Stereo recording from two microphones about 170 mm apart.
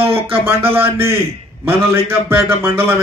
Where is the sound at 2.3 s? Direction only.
15° right (ahead or behind).